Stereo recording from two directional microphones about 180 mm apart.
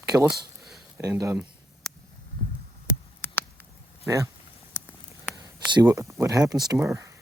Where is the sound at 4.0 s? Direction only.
15° right (ahead or behind).